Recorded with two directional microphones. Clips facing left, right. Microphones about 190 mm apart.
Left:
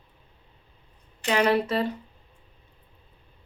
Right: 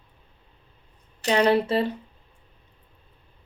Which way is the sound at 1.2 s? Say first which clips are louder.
Right 2 dB; 30° right (ahead or behind).